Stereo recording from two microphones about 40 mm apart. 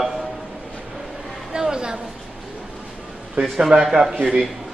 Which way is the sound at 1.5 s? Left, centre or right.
Right.